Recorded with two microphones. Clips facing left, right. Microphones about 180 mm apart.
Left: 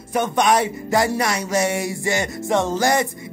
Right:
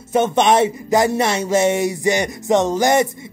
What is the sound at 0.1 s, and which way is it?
Speech, 25° right (ahead or behind).